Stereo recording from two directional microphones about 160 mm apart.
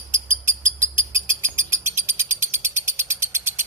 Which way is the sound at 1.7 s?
50° right (ahead or behind).